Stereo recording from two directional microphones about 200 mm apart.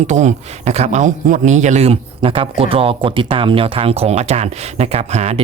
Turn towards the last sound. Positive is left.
turn(degrees=-35)  # may be behind; listen again after turning